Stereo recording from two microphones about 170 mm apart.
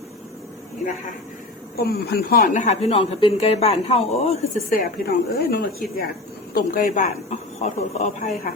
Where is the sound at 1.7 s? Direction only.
65° left (ahead or behind); by 4.4 s 35° left (ahead or behind).